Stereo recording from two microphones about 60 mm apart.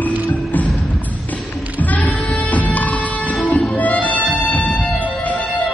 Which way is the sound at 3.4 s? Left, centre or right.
Centre.